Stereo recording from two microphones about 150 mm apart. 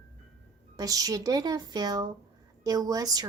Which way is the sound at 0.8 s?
25° right (ahead or behind).